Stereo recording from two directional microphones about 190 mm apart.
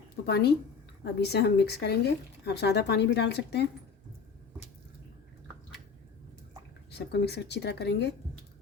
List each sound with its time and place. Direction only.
0.3 s speech: 60° left (ahead or behind)
6.9 s speech: 60° left (ahead or behind)